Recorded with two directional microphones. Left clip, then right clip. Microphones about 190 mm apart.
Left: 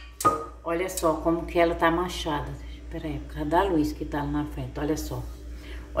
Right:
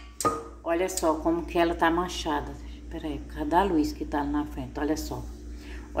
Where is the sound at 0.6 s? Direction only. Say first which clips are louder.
Right 2 dB; 40° right (ahead or behind).